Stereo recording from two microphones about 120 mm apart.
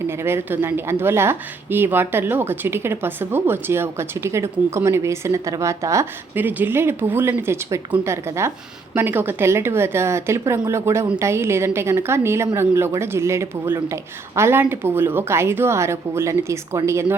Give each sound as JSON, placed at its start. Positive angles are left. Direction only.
{"t": 0.2, "sound": "a woman's voice", "side_deg": -20}